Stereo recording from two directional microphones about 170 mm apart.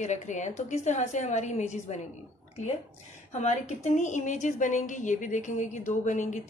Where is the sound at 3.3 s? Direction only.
45° left (ahead or behind).